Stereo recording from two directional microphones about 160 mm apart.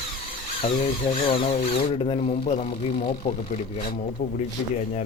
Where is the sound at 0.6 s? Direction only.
35° left (ahead or behind).